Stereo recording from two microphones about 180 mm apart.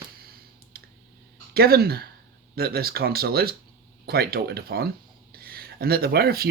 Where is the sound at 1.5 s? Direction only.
60° right (ahead or behind).